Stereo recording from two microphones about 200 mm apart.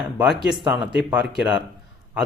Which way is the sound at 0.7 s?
5° right (ahead or behind).